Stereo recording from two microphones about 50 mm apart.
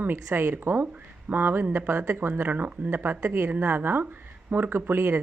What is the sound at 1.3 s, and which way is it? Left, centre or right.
Speech, right.